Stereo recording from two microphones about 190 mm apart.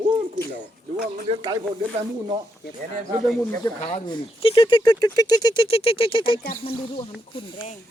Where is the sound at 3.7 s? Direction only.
25° left (ahead or behind).